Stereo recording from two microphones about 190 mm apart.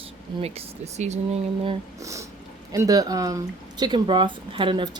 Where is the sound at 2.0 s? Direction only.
15° right (ahead or behind).